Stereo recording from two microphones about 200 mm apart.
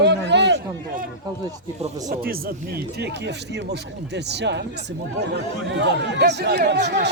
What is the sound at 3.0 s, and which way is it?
A man's voice, 60° right (ahead or behind).